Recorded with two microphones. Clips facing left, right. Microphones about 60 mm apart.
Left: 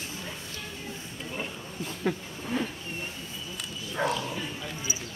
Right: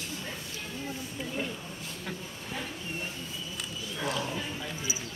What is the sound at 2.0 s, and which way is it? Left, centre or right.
Speech, left.